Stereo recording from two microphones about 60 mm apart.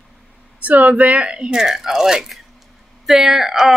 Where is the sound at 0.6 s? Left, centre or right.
Right.